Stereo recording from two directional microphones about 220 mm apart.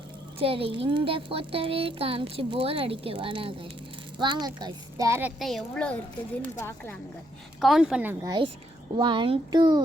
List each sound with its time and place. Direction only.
0.3 s speech: 25° right (ahead or behind)
5.4 s speech: centre (ahead or behind)
7.6 s speech: centre (ahead or behind)
8.2 s speech: 20° right (ahead or behind)